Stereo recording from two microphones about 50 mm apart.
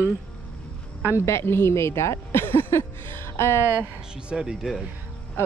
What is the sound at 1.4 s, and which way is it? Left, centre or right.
Speech, left.